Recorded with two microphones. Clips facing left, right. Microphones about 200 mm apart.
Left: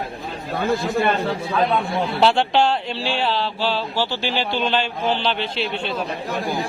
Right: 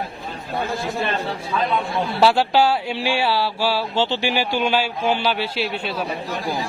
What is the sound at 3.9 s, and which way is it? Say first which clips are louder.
A man's voice: right 2 dB; 20° right (ahead or behind).